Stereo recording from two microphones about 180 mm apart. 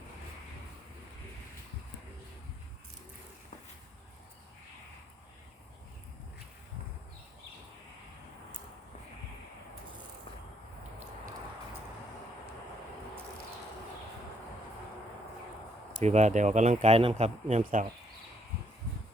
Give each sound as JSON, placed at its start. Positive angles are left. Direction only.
{"t": 16.0, "sound": "speech", "side_deg": -40}